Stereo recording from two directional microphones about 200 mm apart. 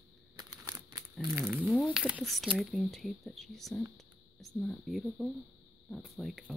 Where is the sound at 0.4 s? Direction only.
20° right (ahead or behind).